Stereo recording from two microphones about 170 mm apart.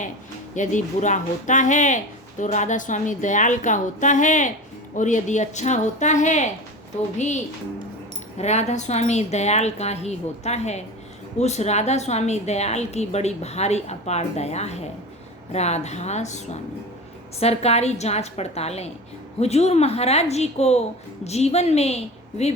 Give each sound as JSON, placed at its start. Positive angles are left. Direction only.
{"t": 0.5, "sound": "a woman's voice", "side_deg": 45}